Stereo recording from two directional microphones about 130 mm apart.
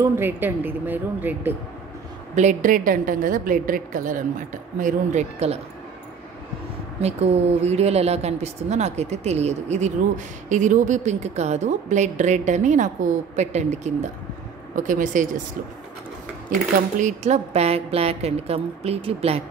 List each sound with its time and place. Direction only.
0.0 s speech: 15° right (ahead or behind)
2.3 s a woman's voice: 75° right (ahead or behind)
4.7 s a woman's voice: 75° right (ahead or behind)
7.0 s a woman's voice: 55° right (ahead or behind)
14.8 s speech: 80° right
17.0 s speech: 60° right (ahead or behind)